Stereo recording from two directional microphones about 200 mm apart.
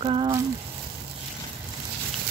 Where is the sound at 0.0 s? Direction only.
25° right (ahead or behind).